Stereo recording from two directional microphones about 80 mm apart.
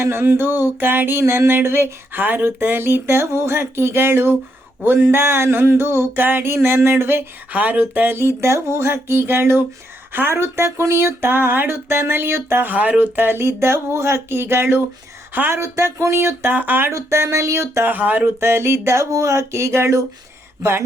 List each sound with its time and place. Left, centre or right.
0.0 s a sound: right
4.9 s speech: right
7.5 s speech: centre
16.9 s speech: right
17.9 s speech: right